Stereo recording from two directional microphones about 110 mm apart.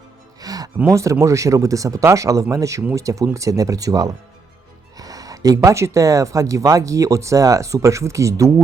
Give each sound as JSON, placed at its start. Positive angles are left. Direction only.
{"t": 0.4, "sound": "music", "side_deg": -35}
{"t": 0.9, "sound": "speech", "side_deg": -30}